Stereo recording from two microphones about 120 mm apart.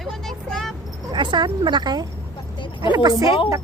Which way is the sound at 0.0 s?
Centre (ahead or behind).